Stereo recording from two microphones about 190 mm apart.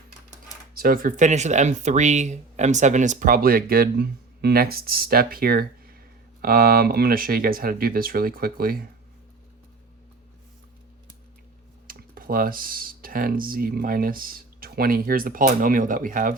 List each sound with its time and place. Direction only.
0.8 s speech: 50° right (ahead or behind)
11.9 s speech: 50° right (ahead or behind)